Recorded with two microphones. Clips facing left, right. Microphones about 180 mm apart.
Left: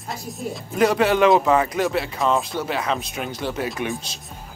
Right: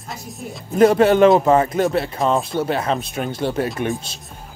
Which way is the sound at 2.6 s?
45° right (ahead or behind).